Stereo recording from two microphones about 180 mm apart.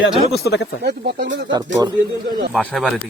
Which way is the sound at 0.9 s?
65° right (ahead or behind).